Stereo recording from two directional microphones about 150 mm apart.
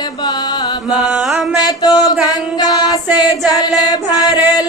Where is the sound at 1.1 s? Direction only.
Centre (ahead or behind).